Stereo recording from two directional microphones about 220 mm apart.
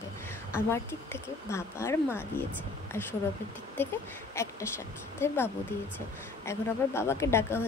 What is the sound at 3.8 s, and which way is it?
Speech, 10° left (ahead or behind).